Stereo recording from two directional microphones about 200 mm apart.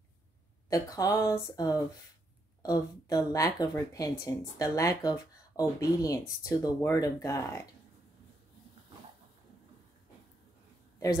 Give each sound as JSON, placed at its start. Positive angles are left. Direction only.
{"t": 0.7, "sound": "speech", "side_deg": 15}